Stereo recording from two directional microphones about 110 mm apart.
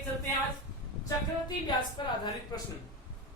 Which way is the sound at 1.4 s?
40° left (ahead or behind).